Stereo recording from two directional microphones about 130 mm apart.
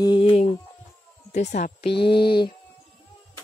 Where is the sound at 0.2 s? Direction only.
50° left (ahead or behind).